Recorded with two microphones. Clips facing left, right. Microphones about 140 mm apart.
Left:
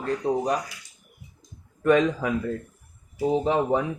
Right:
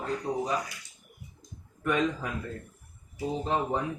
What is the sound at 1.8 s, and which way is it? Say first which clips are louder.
Speech: left 8 dB; 80° left.